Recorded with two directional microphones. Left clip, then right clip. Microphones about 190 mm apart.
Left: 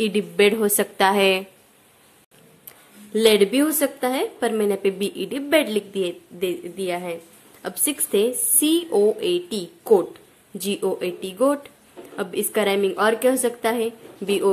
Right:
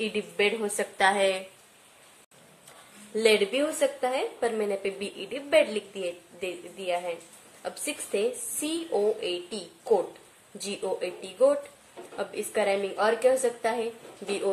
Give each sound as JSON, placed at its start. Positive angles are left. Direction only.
{"t": 0.0, "sound": "a woman's voice", "side_deg": 50}
{"t": 3.2, "sound": "a woman's voice", "side_deg": 50}
{"t": 10.6, "sound": "a woman's voice", "side_deg": 50}